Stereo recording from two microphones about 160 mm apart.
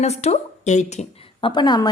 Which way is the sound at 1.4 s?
25° left (ahead or behind).